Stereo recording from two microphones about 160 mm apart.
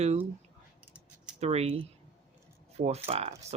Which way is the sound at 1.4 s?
40° right (ahead or behind).